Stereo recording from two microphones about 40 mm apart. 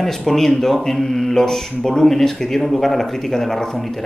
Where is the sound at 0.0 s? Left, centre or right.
Centre.